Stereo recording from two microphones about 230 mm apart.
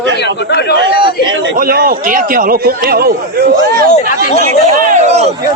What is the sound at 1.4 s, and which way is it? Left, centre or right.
A man's voice, right.